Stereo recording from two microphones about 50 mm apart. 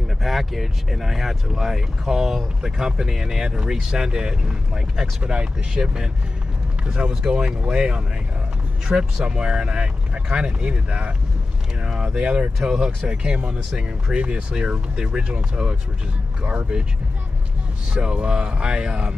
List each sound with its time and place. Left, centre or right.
0.2 s speech: centre
7.2 s speech: centre
17.9 s speech: centre